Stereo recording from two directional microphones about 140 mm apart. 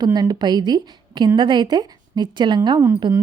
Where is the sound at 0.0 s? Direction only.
30° right (ahead or behind).